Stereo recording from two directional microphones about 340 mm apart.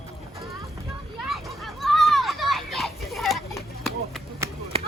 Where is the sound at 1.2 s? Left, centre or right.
Centre.